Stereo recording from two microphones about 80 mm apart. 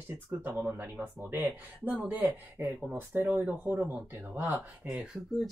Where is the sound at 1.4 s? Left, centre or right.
Centre.